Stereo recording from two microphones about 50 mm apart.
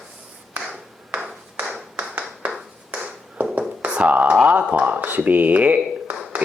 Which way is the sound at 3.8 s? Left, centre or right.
Right.